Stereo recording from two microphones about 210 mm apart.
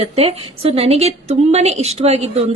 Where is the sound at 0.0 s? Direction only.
25° right (ahead or behind).